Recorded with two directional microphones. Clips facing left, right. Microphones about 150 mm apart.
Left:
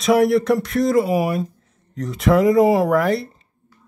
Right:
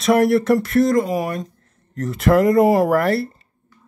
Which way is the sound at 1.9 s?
Centre (ahead or behind).